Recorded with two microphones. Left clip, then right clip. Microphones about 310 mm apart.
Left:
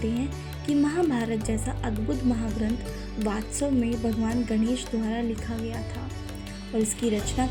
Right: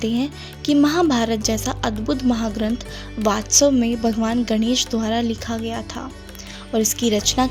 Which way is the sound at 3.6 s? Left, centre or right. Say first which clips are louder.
Right 5 dB; right.